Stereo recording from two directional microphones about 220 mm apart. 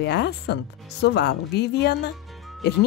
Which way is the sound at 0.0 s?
50° left (ahead or behind).